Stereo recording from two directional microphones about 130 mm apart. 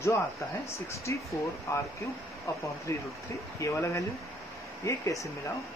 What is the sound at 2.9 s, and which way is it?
Speech, 25° left (ahead or behind).